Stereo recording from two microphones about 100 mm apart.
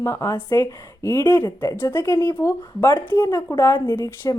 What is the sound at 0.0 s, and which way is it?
Speech, 30° left (ahead or behind).